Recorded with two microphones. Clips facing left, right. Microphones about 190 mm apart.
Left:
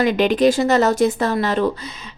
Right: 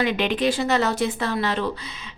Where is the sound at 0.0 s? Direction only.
40° left (ahead or behind).